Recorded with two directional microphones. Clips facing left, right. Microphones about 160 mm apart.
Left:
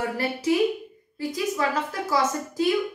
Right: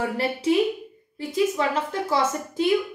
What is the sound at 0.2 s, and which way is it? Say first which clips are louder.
A woman's voice: right 1 dB; 30° right (ahead or behind).